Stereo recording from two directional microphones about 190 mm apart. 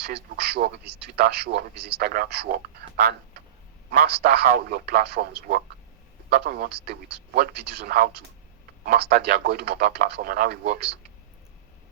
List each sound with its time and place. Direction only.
0.0 s a man's voice: 60° right (ahead or behind)